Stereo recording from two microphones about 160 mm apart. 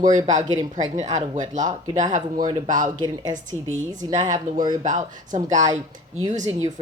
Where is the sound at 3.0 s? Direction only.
25° right (ahead or behind).